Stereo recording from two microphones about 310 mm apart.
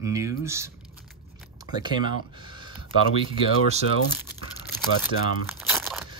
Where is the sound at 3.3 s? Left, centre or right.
Right.